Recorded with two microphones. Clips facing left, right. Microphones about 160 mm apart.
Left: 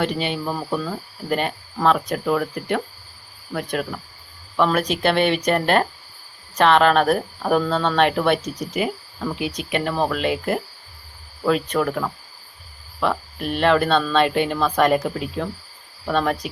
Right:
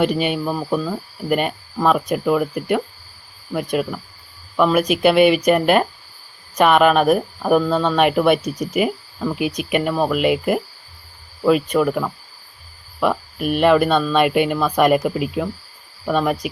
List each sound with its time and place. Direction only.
0.0 s speech: 10° right (ahead or behind)